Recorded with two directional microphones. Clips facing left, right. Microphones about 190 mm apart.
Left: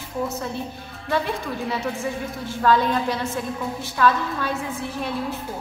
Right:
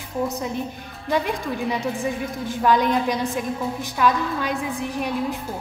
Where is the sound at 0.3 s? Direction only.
15° right (ahead or behind).